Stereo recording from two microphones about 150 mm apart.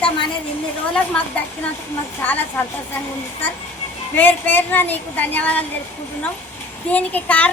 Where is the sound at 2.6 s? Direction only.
10° left (ahead or behind).